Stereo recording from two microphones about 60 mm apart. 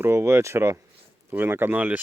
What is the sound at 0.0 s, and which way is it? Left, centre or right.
Speech, right.